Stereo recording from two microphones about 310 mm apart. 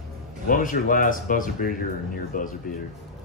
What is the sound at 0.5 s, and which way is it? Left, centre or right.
Speech, left.